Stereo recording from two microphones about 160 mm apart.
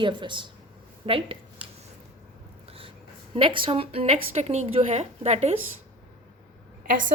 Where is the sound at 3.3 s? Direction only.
30° right (ahead or behind).